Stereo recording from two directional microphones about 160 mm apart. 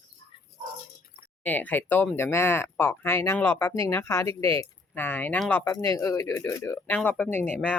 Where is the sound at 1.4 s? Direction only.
10° left (ahead or behind).